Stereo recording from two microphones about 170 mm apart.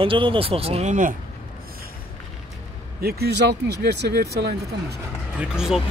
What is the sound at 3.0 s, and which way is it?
Speech, 65° right (ahead or behind).